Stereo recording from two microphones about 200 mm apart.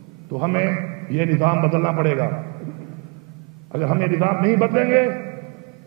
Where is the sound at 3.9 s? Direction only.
20° right (ahead or behind).